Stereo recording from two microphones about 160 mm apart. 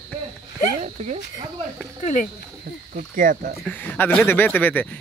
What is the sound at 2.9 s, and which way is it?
Speech, 55° right (ahead or behind).